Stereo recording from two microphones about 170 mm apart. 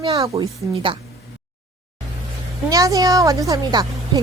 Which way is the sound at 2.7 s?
20° right (ahead or behind).